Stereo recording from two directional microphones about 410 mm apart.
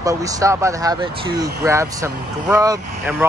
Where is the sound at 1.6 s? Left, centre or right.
Centre.